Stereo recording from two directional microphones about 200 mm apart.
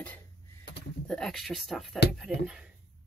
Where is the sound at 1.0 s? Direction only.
5° left (ahead or behind).